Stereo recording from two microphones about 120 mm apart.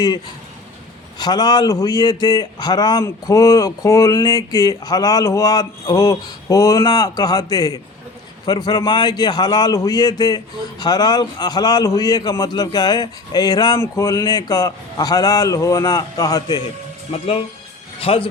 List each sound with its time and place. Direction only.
1.2 s a man's voice: 35° left (ahead or behind)
17.1 s speech: 55° left (ahead or behind)